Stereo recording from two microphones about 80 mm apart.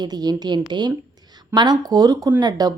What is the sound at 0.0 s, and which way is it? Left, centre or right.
A woman's voice, right.